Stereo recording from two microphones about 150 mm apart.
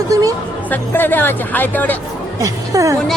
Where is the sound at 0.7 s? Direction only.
10° left (ahead or behind).